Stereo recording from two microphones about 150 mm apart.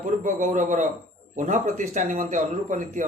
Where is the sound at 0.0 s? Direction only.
55° right (ahead or behind).